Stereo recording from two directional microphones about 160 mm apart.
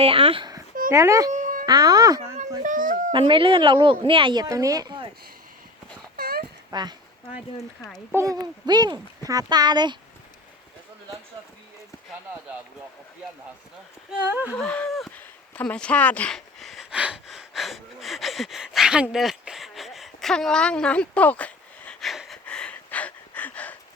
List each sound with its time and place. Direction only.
0.0 s speech: 35° right (ahead or behind)
0.9 s a child's voice: 20° right (ahead or behind)
1.3 s music: 55° right (ahead or behind)
1.6 s a child's voice: 25° right (ahead or behind)
2.6 s speech: 55° right (ahead or behind)
3.1 s a child's voice: 30° right (ahead or behind)
6.1 s dog: 75° right (ahead or behind)
6.7 s speech: 25° right (ahead or behind)
8.1 s a child's voice: 20° right (ahead or behind)
14.1 s speech: 10° right (ahead or behind)
14.5 s a sound: 10° left (ahead or behind)